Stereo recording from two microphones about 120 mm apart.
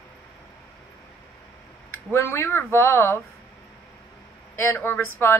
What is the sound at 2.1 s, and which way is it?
Speech, 20° left (ahead or behind).